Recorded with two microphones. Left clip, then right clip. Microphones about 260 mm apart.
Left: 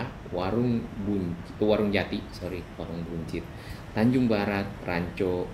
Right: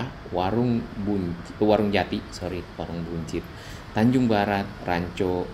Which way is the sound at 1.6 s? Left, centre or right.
Right.